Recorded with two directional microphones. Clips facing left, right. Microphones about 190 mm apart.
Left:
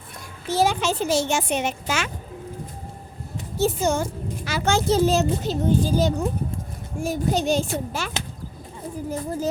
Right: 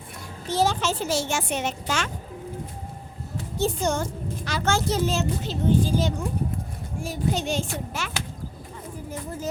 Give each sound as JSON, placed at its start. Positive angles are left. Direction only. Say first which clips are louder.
{"t": 0.4, "sound": "a child's voice", "louder": "left 2 dB", "side_deg": 10}
{"t": 3.6, "sound": "a woman's voice", "louder": "left 3 dB", "side_deg": 5}
{"t": 4.9, "sound": "a child's voice", "louder": "left 5 dB", "side_deg": 35}